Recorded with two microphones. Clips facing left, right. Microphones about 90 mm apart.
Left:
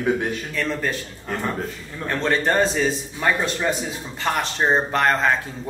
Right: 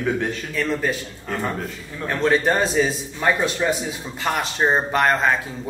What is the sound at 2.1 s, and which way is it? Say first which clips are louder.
Speech: right 2 dB; 5° right (ahead or behind).